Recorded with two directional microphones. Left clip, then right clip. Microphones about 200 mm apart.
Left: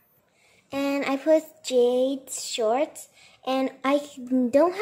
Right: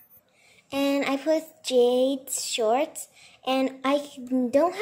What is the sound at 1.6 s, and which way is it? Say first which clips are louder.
Speech: even; centre (ahead or behind).